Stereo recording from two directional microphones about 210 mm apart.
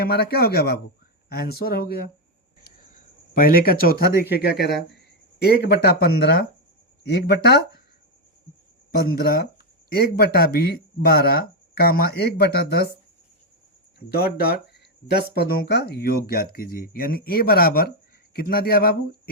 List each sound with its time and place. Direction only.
0.0 s speech: 45° left (ahead or behind)
3.3 s speech: 45° left (ahead or behind)
8.9 s speech: 45° left (ahead or behind)
14.1 s speech: 45° left (ahead or behind)